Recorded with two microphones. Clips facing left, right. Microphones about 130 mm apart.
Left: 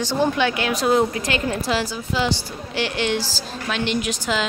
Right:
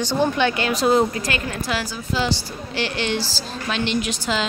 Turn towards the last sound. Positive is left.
turn(degrees=10)  # may be behind; listen again after turning